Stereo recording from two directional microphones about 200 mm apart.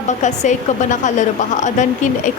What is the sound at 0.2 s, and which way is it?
A woman's voice, 35° left (ahead or behind).